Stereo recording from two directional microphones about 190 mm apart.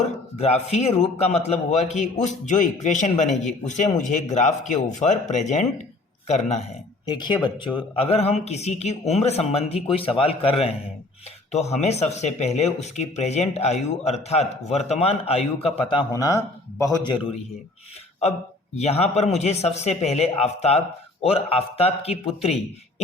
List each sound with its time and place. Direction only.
0.0 s speech: 35° left (ahead or behind)
7.0 s speech: 20° left (ahead or behind)
18.2 s speech: 35° left (ahead or behind)